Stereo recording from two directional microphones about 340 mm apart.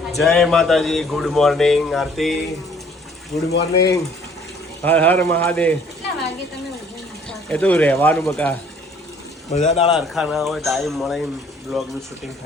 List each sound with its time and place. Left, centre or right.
0.1 s a man's voice: centre
3.5 s speech: left
4.8 s a man's voice: centre
7.3 s a man's voice: centre
9.5 s speech: centre
9.9 s a man's voice: centre